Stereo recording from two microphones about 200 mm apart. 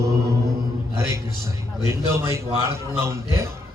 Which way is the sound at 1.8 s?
15° right (ahead or behind).